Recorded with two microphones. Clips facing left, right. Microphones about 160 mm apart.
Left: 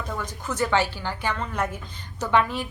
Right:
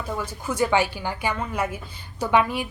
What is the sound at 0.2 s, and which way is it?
Speech, 10° right (ahead or behind).